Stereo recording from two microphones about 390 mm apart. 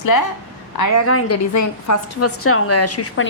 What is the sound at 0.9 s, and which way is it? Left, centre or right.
A woman's voice, left.